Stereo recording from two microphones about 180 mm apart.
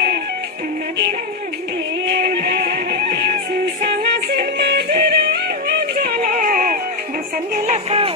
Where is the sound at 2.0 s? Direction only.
60° right (ahead or behind).